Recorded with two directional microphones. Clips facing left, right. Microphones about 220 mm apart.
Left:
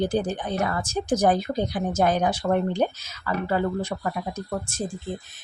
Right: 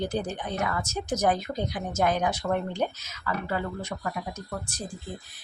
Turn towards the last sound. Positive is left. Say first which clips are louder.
# left 6 dB
turn(degrees=25)  # may be behind; listen again after turning